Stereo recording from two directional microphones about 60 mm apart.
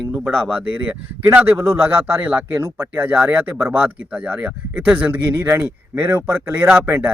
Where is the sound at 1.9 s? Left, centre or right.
Right.